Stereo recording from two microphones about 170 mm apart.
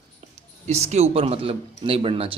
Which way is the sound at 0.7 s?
40° right (ahead or behind).